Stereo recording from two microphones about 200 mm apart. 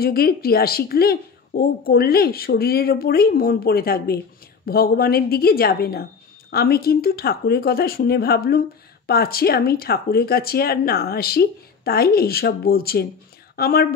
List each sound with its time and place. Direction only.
0.0 s speech: 50° left (ahead or behind)